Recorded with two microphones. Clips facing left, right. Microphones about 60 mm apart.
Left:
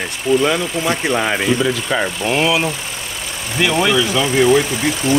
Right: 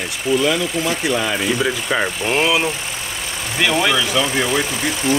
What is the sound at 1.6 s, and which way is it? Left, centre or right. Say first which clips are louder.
Speech: left 1 dB; centre.